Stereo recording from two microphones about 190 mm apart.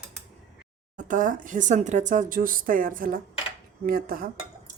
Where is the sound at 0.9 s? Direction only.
40° right (ahead or behind).